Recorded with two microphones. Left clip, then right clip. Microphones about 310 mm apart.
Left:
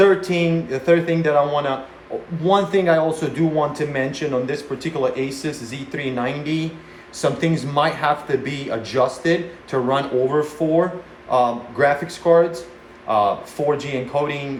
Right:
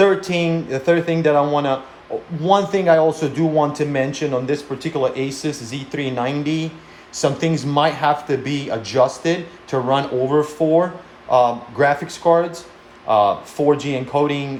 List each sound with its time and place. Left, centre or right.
0.0 s speech: right